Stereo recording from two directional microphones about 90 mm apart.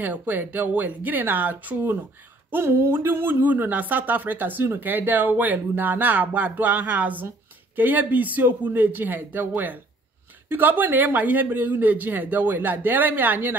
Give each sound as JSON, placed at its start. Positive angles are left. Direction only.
{"t": 0.0, "sound": "speech", "side_deg": -20}